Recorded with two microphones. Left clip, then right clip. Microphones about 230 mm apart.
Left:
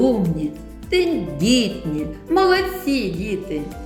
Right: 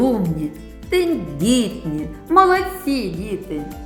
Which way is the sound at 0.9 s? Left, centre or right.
Centre.